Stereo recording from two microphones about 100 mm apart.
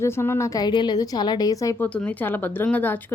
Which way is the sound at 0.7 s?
50° left (ahead or behind).